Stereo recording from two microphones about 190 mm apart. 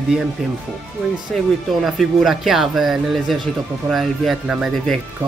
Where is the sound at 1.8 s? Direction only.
Centre (ahead or behind).